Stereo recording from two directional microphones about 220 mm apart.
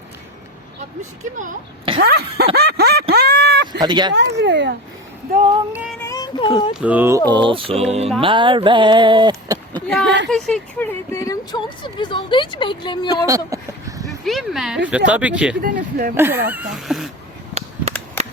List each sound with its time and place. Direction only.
1.2 s speech: 30° right (ahead or behind)
2.0 s speech: 50° right (ahead or behind)
2.6 s a sound: 45° right (ahead or behind)
3.7 s speech: 20° right (ahead or behind)
4.1 s speech: 55° right (ahead or behind)
6.0 s a sound: 15° left (ahead or behind)
6.7 s speech: 5° right (ahead or behind)
7.3 s speech: 20° right (ahead or behind)
9.8 s a woman's voice: 5° left (ahead or behind); by 13.2 s 20° left (ahead or behind)
13.2 s a sound: 15° right (ahead or behind)
14.3 s speech: centre (ahead or behind)
15.6 s speech: 40° right (ahead or behind)
16.1 s speech: 10° right (ahead or behind)
17.6 s a sound: 30° right (ahead or behind)